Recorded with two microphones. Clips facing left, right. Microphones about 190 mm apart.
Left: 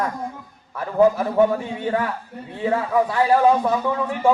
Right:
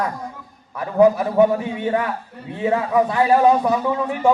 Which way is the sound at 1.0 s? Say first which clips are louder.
Right 2 dB; 15° right (ahead or behind).